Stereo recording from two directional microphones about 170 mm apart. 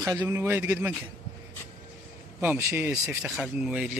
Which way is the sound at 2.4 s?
10° right (ahead or behind).